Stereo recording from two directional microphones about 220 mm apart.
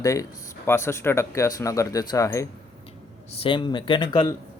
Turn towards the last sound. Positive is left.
turn(degrees=20)  # may be behind; listen again after turning